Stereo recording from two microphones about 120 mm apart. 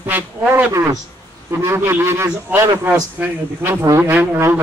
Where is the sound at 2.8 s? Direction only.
10° right (ahead or behind).